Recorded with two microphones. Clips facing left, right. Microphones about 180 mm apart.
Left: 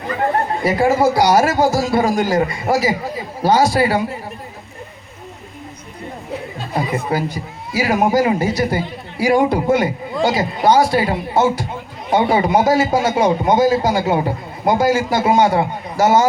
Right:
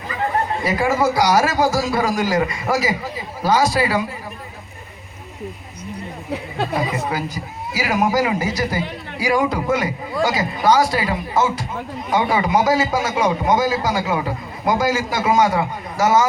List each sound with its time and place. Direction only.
0.6 s a man's voice: 30° left (ahead or behind)
7.1 s a man's voice: 30° left (ahead or behind)